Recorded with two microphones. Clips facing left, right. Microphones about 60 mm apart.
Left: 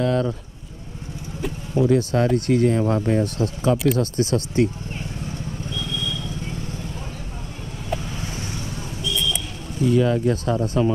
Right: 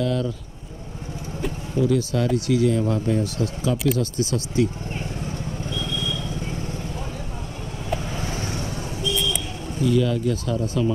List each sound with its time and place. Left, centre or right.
0.0 s speech: left
1.9 s speech: left
3.7 s speech: centre
4.0 s speech: left
5.8 s vehicle: right
8.0 s vehicle: right
9.8 s speech: left